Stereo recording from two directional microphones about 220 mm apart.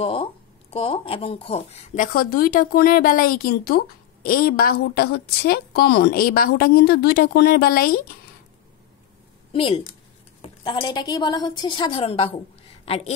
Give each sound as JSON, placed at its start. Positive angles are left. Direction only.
{"t": 0.0, "sound": "speech", "side_deg": 25}
{"t": 9.5, "sound": "a woman's voice", "side_deg": 25}